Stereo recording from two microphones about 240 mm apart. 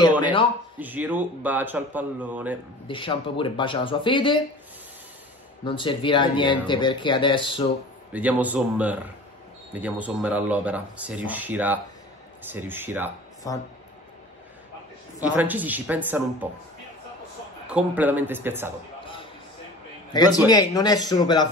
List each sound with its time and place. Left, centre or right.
0.2 s a man's voice: left
0.7 s speech: centre
2.9 s speech: left
5.6 s speech: centre
8.1 s speech: centre
13.4 s a man's voice: centre
15.2 s speech: centre
17.6 s speech: centre
20.1 s a man's voice: centre